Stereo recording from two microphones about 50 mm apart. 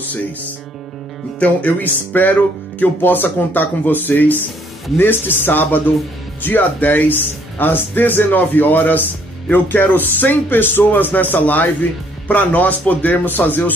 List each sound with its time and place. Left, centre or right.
1.4 s speech: left
1.9 s speech: left